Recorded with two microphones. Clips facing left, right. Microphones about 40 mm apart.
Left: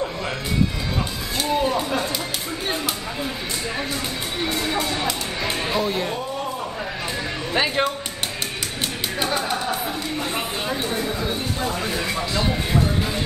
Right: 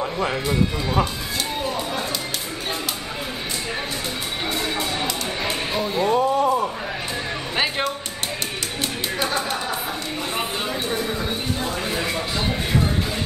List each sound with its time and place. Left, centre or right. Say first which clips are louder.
5.4 s a sound: left 3 dB; centre
7.5 s music: left 2 dB; centre
9.2 s music: left 1 dB; centre
11.9 s music: right 1 dB; centre